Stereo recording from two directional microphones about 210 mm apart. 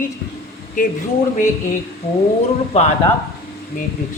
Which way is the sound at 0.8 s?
40° left (ahead or behind).